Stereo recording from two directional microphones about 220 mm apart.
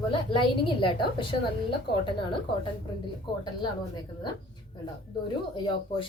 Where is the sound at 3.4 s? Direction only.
20° left (ahead or behind).